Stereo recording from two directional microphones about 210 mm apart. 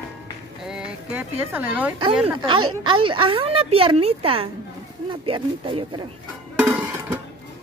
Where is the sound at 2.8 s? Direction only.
25° right (ahead or behind).